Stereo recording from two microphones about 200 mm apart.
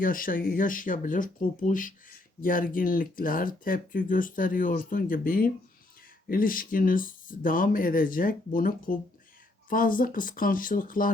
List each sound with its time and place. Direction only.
0.0 s speech: 45° left (ahead or behind)